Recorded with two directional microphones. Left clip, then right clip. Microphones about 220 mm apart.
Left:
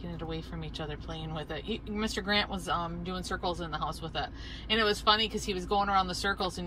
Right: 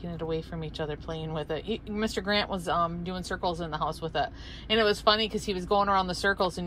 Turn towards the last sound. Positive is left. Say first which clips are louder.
# right 5 dB
turn(degrees=-10)  # may be behind; listen again after turning